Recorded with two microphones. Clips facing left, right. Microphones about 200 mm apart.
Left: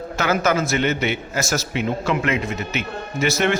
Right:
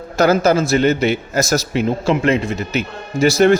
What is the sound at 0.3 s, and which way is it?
A man's voice, 30° right (ahead or behind).